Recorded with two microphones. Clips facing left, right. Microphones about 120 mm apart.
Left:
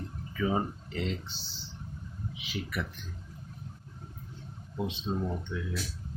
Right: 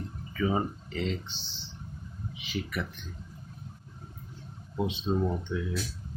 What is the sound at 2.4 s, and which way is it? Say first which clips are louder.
Speech: right 2 dB; 5° left (ahead or behind).